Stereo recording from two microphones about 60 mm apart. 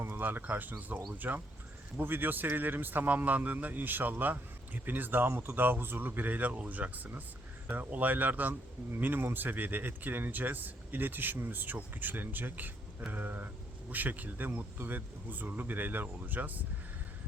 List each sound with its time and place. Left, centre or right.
0.2 s a man's voice: right